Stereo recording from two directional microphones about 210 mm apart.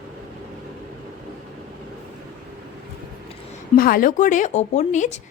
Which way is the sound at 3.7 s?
40° left (ahead or behind).